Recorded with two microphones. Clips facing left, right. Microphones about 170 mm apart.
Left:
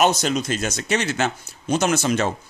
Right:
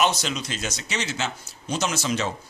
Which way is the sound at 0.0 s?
45° left (ahead or behind).